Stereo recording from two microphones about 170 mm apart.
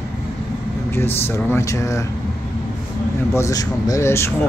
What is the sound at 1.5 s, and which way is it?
Speech, 20° left (ahead or behind).